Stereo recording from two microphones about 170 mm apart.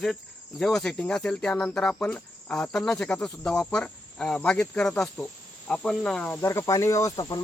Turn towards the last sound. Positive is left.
turn(degrees=25)  # may be behind; listen again after turning